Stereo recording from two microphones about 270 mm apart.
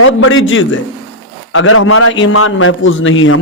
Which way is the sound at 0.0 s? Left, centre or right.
Left.